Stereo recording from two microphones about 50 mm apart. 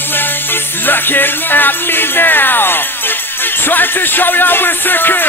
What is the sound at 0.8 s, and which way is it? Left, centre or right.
Music, left.